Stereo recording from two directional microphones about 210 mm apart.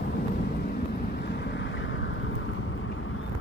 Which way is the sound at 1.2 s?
55° left (ahead or behind).